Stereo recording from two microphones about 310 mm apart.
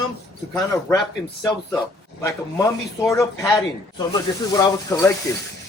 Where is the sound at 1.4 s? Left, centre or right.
Centre.